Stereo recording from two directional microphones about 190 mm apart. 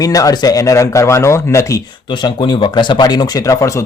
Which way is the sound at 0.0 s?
20° left (ahead or behind).